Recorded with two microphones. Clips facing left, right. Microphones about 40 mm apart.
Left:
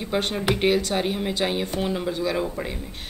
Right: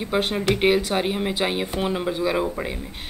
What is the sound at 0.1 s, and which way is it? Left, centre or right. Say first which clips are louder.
Speech: right 2 dB; centre.